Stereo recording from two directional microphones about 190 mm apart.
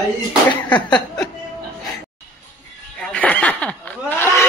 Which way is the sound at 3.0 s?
5° left (ahead or behind).